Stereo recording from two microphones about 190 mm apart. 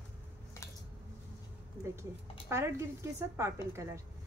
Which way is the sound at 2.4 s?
15° right (ahead or behind).